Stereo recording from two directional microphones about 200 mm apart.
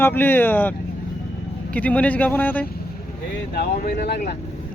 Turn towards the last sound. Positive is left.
turn(degrees=55)  # may be behind; listen again after turning